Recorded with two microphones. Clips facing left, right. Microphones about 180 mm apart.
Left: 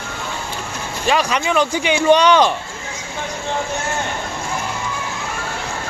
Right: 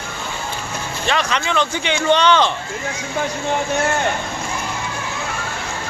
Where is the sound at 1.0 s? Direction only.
10° left (ahead or behind).